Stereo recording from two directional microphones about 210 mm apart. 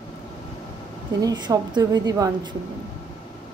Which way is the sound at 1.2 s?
20° right (ahead or behind).